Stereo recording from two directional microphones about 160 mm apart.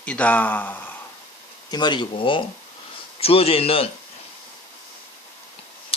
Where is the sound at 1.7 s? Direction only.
25° left (ahead or behind).